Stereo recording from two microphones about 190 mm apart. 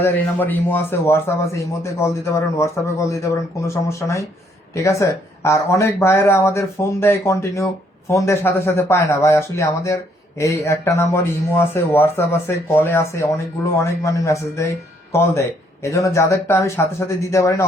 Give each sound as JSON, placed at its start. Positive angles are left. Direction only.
{"t": 0.0, "sound": "speech", "side_deg": 10}